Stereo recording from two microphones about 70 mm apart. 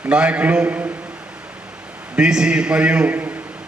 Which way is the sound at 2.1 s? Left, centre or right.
Centre.